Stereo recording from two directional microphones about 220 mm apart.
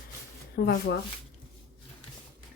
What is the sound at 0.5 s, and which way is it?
Speech, 45° left (ahead or behind).